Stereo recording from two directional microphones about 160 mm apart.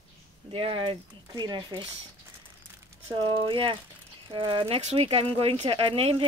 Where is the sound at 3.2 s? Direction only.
35° right (ahead or behind).